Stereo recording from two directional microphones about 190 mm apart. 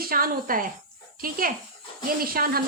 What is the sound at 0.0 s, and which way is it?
Speech, 50° right (ahead or behind).